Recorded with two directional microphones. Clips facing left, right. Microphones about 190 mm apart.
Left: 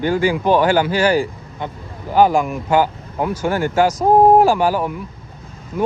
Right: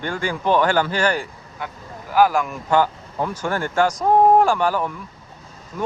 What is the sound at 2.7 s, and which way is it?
Speech, 10° left (ahead or behind).